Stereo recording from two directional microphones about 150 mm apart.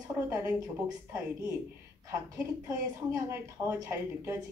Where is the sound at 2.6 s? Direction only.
20° right (ahead or behind).